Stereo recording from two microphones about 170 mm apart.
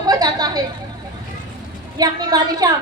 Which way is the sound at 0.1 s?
25° right (ahead or behind).